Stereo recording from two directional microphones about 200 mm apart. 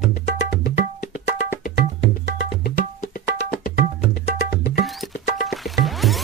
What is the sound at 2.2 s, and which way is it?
Music, 45° left (ahead or behind).